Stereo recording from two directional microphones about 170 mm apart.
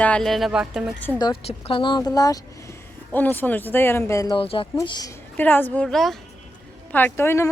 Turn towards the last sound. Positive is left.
turn(degrees=15)  # may be behind; listen again after turning